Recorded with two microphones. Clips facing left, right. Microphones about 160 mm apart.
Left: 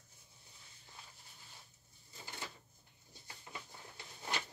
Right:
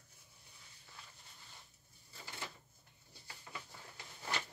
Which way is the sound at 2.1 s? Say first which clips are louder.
Even; 20° left (ahead or behind).